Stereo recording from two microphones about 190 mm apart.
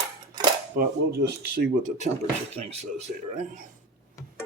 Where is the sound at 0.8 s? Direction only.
55° right (ahead or behind).